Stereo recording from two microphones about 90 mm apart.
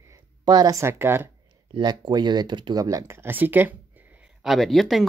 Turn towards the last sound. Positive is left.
turn(degrees=0)  # may be behind; listen again after turning